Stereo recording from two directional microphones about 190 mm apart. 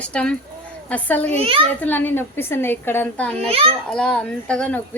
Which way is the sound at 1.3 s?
30° right (ahead or behind).